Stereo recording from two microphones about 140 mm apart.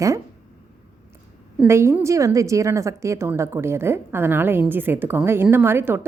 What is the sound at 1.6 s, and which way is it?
A woman's voice, 20° right (ahead or behind).